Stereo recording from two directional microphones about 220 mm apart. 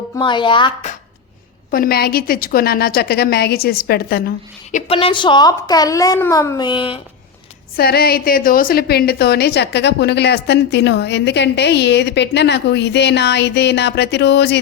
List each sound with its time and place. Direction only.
0.2 s a woman's voice: 20° left (ahead or behind)
1.7 s a woman's voice: 45° left (ahead or behind)
4.7 s a woman's voice: 25° left (ahead or behind)
7.8 s a woman's voice: 45° left (ahead or behind)